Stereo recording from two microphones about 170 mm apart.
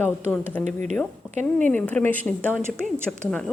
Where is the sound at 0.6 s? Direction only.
45° right (ahead or behind).